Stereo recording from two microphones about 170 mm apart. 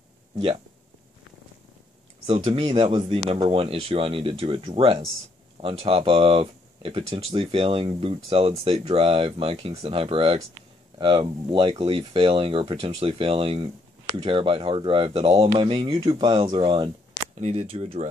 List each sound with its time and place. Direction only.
2.2 s speech: 30° right (ahead or behind)
17.4 s speech: 40° right (ahead or behind)